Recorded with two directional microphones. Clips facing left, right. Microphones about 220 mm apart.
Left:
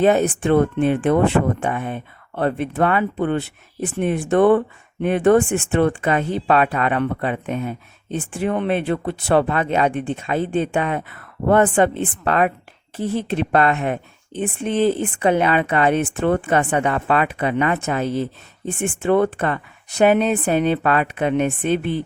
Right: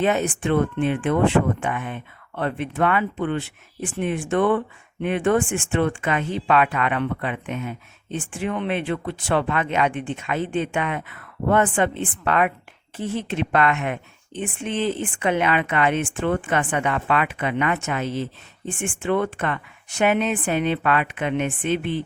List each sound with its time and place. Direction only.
0.0 s speech: 40° left (ahead or behind)